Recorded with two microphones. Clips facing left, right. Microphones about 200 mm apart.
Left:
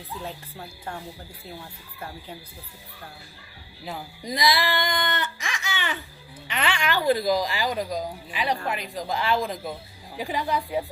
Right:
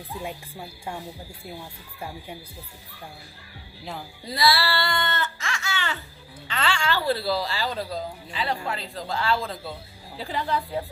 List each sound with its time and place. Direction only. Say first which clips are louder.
0.2 s speech: right 3 dB; 10° right (ahead or behind)
4.2 s a sound: even; 15° left (ahead or behind)
6.5 s speech: even; 20° left (ahead or behind)